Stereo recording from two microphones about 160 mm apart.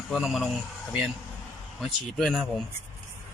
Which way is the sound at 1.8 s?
Centre (ahead or behind).